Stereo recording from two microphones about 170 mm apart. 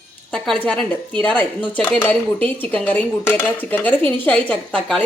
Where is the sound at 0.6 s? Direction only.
5° left (ahead or behind).